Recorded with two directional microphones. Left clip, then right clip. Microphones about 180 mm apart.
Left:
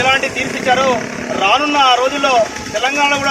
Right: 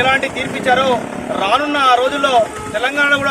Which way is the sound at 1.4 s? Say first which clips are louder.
Left 3 dB; 15° right (ahead or behind).